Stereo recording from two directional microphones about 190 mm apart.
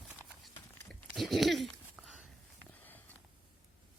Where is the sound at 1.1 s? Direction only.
Centre (ahead or behind).